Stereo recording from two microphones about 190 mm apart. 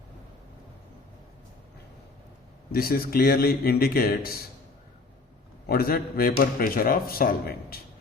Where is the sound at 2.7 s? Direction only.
50° left (ahead or behind).